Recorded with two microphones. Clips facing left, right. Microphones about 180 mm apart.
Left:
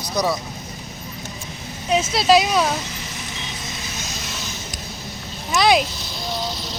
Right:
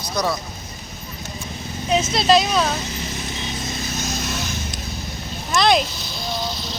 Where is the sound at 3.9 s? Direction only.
50° right (ahead or behind).